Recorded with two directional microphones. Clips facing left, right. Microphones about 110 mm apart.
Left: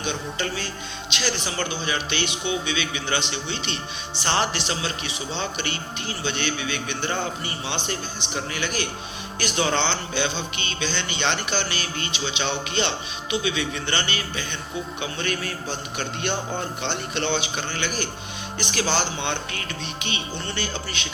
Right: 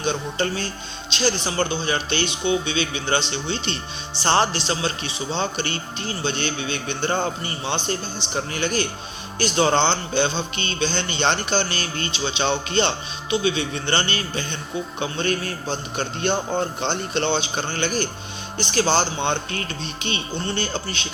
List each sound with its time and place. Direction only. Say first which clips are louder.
0.0 s a man's voice: right 4 dB; 35° right (ahead or behind)